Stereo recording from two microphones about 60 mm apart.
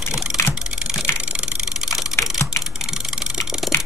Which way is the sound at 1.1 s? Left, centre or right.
Centre.